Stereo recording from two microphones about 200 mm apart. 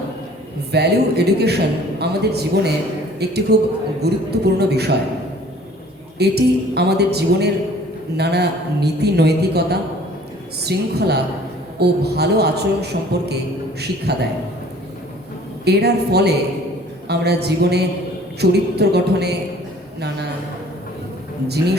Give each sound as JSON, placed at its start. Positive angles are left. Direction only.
{"t": 0.7, "sound": "a man's voice", "side_deg": -55}
{"t": 6.1, "sound": "a man's voice", "side_deg": -55}
{"t": 15.6, "sound": "a man's voice", "side_deg": -55}